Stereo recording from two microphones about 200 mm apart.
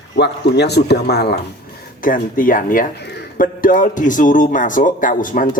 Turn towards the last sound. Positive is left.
turn(degrees=40)  # may be behind; listen again after turning